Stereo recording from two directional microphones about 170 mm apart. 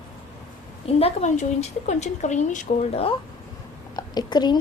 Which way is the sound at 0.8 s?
40° left (ahead or behind).